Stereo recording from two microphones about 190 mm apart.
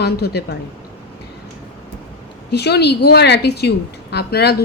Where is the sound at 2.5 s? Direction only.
60° left (ahead or behind).